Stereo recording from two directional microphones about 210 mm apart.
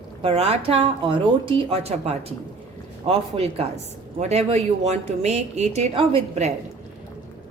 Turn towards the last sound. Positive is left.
turn(degrees=-30)  # may be behind; listen again after turning